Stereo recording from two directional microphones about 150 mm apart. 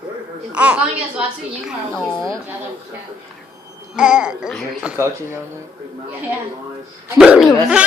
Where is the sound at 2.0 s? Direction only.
25° left (ahead or behind).